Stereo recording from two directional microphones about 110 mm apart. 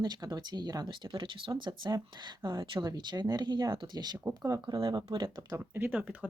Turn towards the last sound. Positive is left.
turn(degrees=-15)  # may be behind; listen again after turning